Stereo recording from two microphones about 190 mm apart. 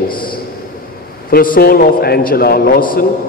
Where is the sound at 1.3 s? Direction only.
50° left (ahead or behind).